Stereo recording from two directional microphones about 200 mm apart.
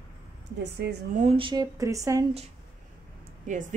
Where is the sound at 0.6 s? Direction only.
55° right (ahead or behind).